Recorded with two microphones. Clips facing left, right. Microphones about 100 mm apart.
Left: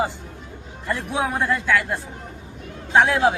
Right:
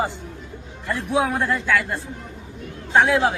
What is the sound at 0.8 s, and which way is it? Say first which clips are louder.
Speech: right 3 dB; 15° left (ahead or behind).